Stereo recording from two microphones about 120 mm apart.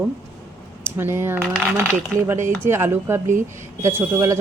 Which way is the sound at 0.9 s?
20° right (ahead or behind).